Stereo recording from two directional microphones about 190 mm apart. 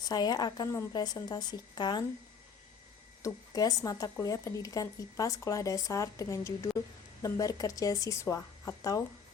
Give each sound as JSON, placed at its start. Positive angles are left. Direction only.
{"t": 0.1, "sound": "a woman's voice", "side_deg": 20}
{"t": 3.2, "sound": "speech", "side_deg": 20}